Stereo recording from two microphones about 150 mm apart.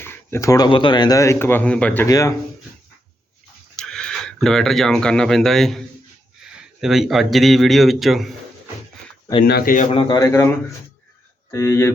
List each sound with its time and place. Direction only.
0.0 s speech: 15° left (ahead or behind)
2.0 s speech: 25° left (ahead or behind)
3.8 s a man's voice: 5° left (ahead or behind)
9.5 s a man's voice: 80° left
9.9 s speech: 35° left (ahead or behind)
10.2 s speech: 20° left (ahead or behind)
11.5 s speech: 20° left (ahead or behind)